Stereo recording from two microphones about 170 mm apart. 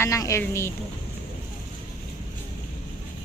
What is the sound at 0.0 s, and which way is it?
Speech, 20° left (ahead or behind).